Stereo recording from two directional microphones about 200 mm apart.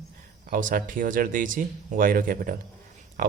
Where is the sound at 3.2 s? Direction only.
45° right (ahead or behind).